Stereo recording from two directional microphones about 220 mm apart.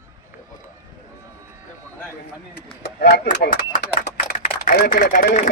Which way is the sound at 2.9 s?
50° left (ahead or behind).